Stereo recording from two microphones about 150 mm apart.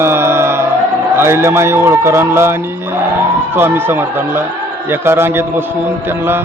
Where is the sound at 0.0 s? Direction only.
15° right (ahead or behind).